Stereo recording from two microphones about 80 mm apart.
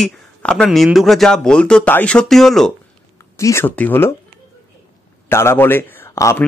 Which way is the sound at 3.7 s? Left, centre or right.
Left.